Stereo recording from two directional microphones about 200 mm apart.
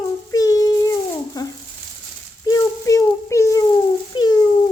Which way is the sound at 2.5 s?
15° left (ahead or behind).